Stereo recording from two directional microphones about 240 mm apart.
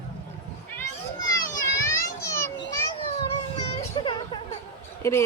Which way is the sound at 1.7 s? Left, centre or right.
Centre.